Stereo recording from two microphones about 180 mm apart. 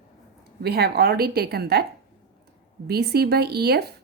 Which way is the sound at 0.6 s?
60° right (ahead or behind).